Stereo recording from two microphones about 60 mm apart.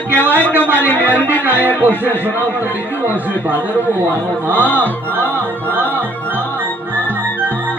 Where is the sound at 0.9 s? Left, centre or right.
Left.